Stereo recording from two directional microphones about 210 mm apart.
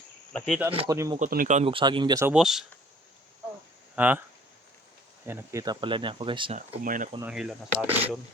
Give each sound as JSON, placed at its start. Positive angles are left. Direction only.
{"t": 0.3, "sound": "speech", "side_deg": 0}
{"t": 0.7, "sound": "speech", "side_deg": -25}
{"t": 0.9, "sound": "speech", "side_deg": -15}
{"t": 1.2, "sound": "speech", "side_deg": -40}
{"t": 2.3, "sound": "speech", "side_deg": 0}
{"t": 3.9, "sound": "speech", "side_deg": -10}
{"t": 5.2, "sound": "speech", "side_deg": -10}
{"t": 6.6, "sound": "speech", "side_deg": -40}
{"t": 7.2, "sound": "speech", "side_deg": -5}